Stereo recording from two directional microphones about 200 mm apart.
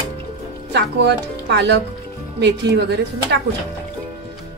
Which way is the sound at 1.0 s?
60° right (ahead or behind).